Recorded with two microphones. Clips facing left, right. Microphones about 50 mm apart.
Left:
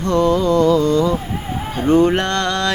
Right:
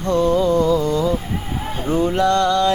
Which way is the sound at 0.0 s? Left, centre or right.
Left.